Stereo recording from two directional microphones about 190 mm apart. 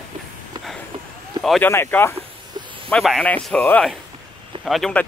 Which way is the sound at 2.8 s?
Centre (ahead or behind).